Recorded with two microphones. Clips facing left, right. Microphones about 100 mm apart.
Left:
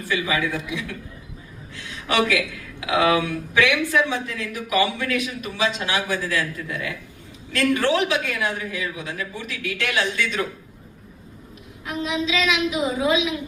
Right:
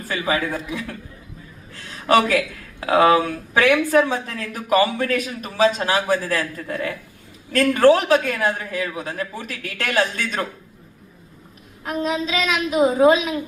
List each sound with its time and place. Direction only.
0.0 s a man's voice: 40° right (ahead or behind)
11.9 s speech: 40° right (ahead or behind)